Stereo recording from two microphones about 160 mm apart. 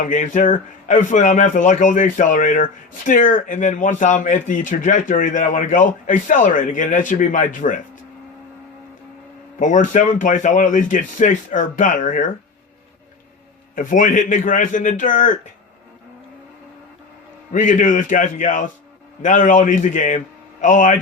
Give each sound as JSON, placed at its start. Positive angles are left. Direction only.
{"t": 0.0, "sound": "speech", "side_deg": 55}
{"t": 9.6, "sound": "speech", "side_deg": 50}
{"t": 13.7, "sound": "speech", "side_deg": 55}
{"t": 17.5, "sound": "speech", "side_deg": 50}